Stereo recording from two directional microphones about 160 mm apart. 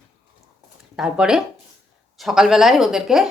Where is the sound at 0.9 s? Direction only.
5° right (ahead or behind).